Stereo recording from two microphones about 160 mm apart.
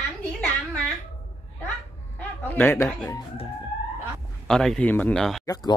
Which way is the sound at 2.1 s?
10° left (ahead or behind).